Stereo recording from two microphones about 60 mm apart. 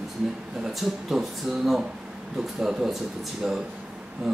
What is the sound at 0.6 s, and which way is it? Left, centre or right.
A man's voice, centre.